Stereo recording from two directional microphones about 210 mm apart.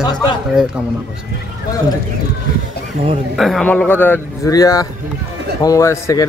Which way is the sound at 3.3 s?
Centre (ahead or behind).